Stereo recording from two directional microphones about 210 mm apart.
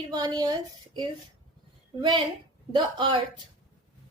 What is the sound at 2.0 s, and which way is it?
A woman's voice, 25° right (ahead or behind).